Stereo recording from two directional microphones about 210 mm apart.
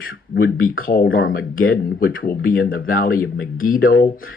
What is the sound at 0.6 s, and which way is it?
Speech, 45° left (ahead or behind).